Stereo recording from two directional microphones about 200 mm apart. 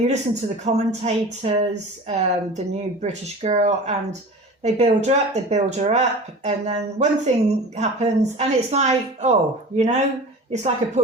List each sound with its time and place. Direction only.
0.6 s speech: 35° right (ahead or behind)